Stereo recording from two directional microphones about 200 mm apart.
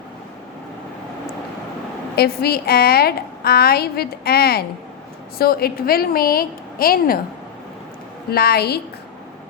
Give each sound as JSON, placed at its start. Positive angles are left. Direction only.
{"t": 2.1, "sound": "a woman's voice", "side_deg": 50}
{"t": 8.3, "sound": "a woman's voice", "side_deg": 50}